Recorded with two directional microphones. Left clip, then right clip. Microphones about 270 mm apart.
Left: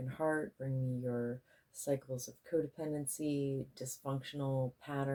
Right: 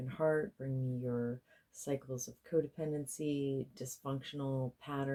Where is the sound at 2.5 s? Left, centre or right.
Right.